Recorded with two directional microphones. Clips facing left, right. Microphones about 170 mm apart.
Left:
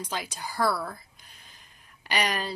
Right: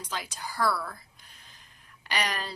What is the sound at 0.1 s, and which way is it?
Speech, 15° left (ahead or behind).